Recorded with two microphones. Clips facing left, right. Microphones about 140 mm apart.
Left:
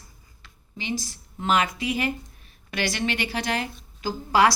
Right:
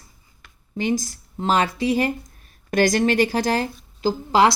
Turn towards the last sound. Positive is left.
turn(degrees=-25)  # may be behind; listen again after turning